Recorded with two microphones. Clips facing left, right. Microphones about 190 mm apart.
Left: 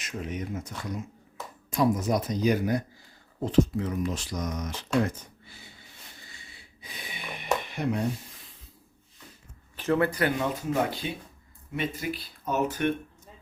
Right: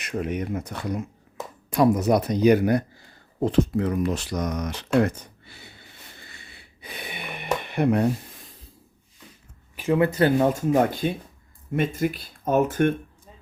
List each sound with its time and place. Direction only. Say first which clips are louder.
0.0 s speech: right 7 dB; 60° right (ahead or behind)
6.2 s a sound: right 3 dB; 65° right (ahead or behind)
9.7 s speech: right 4 dB; 15° right (ahead or behind); by 10.4 s 30° right (ahead or behind)
10.4 s speech: right 7 dB; 45° right (ahead or behind)